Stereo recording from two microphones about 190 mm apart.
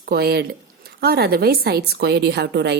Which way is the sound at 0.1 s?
55° right (ahead or behind).